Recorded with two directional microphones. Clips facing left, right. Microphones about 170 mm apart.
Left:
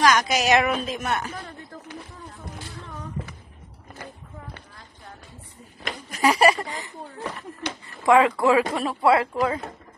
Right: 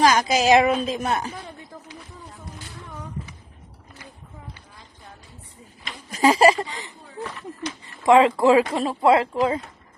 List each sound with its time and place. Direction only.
0.0 s speech: 30° right (ahead or behind)
6.2 s speech: 25° right (ahead or behind)
8.0 s speech: 20° right (ahead or behind)